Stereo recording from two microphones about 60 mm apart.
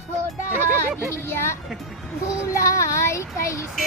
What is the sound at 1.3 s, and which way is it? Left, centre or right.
Music, left.